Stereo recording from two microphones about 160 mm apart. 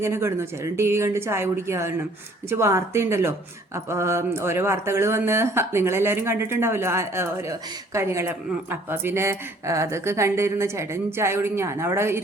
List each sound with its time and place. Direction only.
0.0 s speech: 15° right (ahead or behind)